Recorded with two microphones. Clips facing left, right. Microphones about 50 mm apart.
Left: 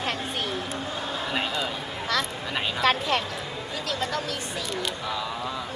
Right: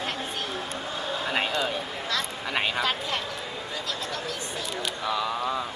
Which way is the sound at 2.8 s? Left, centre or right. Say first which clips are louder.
Left 5 dB; left.